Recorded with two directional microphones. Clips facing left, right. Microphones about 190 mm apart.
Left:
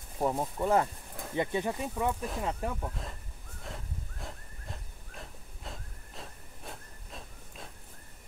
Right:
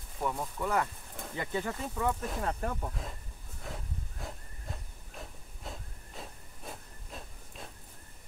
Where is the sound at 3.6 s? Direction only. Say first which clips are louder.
Right 1 dB; centre (ahead or behind).